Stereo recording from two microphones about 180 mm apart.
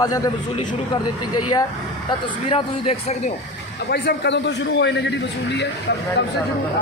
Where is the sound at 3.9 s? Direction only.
65° left (ahead or behind).